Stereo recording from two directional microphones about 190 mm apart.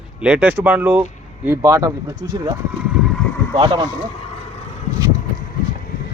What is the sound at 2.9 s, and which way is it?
Vehicle, 5° right (ahead or behind).